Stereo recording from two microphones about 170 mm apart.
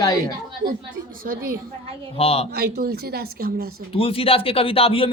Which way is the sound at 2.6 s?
70° right (ahead or behind).